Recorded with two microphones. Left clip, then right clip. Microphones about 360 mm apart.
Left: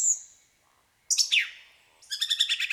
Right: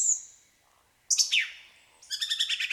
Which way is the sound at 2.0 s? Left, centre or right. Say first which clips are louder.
Left 3 dB; left.